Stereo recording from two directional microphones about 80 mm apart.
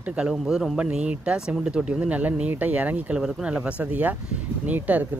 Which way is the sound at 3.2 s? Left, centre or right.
Centre.